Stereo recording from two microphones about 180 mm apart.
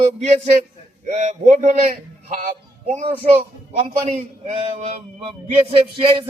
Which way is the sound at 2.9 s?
35° right (ahead or behind).